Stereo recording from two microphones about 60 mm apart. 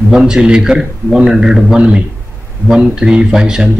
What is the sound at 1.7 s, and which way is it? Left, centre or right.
A man's voice, centre.